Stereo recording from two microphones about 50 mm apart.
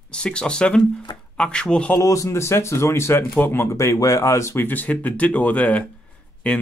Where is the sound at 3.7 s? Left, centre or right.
Left.